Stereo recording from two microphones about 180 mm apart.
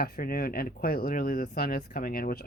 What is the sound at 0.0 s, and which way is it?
Speech, 55° left (ahead or behind).